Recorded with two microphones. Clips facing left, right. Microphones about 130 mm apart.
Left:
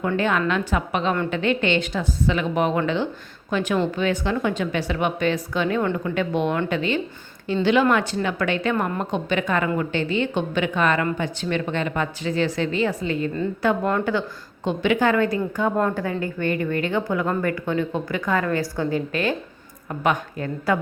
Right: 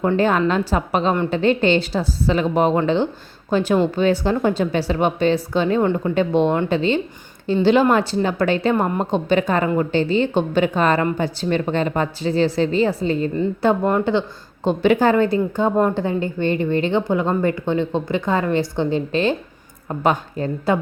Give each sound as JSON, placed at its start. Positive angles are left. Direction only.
{"t": 0.1, "sound": "a woman's voice", "side_deg": -35}
{"t": 13.3, "sound": "a woman's voice", "side_deg": -20}
{"t": 14.7, "sound": "a woman's voice", "side_deg": -35}